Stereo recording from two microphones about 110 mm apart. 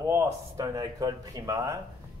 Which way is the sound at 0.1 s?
30° right (ahead or behind).